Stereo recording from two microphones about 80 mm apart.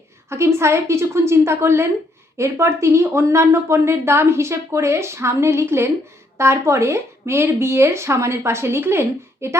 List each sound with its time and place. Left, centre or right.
0.3 s speech: right